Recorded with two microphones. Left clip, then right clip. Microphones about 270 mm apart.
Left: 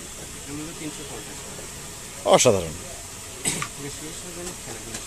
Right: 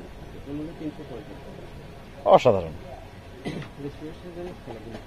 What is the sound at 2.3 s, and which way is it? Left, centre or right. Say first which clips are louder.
Speech: even; left.